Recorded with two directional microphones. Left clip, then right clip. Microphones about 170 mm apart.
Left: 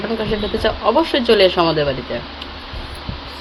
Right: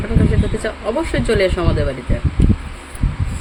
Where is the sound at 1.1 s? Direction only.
15° right (ahead or behind).